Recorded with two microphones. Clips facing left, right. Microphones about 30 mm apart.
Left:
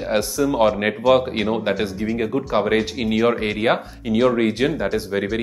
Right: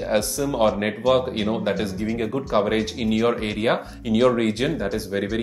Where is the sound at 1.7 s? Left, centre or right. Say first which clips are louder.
Left 2 dB; centre.